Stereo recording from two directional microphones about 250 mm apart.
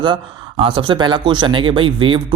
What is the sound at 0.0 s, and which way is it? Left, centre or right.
Speech, right.